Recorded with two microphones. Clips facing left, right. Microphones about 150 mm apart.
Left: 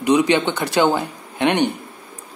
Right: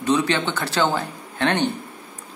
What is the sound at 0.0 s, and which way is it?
Speech, 15° left (ahead or behind).